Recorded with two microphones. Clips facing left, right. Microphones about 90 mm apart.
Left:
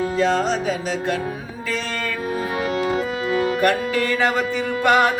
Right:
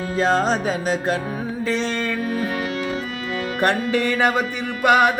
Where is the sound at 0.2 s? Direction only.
40° right (ahead or behind).